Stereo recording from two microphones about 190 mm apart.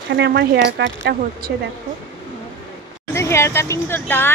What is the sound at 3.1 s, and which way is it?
A woman's voice, 15° left (ahead or behind).